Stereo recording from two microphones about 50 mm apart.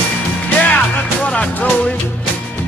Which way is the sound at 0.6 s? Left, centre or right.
Left.